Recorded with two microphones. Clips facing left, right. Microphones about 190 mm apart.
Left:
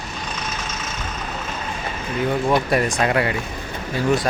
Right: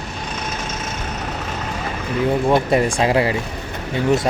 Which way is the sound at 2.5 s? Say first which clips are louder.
Right 3 dB; 25° right (ahead or behind).